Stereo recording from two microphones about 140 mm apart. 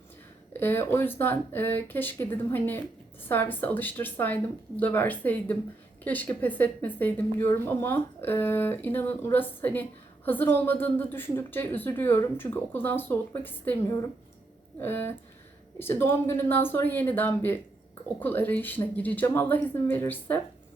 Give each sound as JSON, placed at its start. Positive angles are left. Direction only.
{"t": 0.5, "sound": "speech", "side_deg": 15}